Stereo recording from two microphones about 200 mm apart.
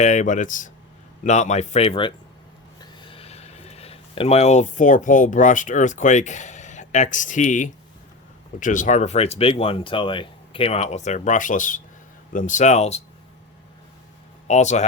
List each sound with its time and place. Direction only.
0.0 s speech: 35° left (ahead or behind)
14.4 s speech: 35° left (ahead or behind)